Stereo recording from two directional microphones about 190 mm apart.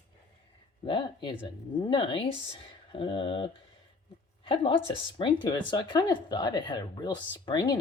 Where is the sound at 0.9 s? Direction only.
25° left (ahead or behind).